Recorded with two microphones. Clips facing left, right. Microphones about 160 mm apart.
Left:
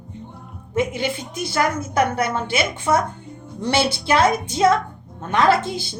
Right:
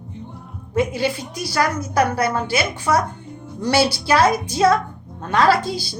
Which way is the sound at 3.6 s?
25° left (ahead or behind).